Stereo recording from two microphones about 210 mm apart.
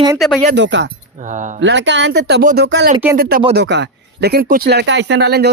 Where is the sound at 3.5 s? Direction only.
55° right (ahead or behind).